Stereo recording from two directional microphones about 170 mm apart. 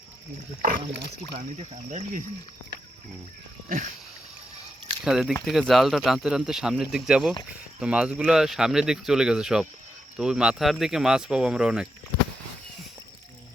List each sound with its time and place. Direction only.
0.9 s speech: 85° right
1.4 s speech: 40° right (ahead or behind)
3.7 s speech: 50° right (ahead or behind)
5.0 s speech: 5° right (ahead or behind)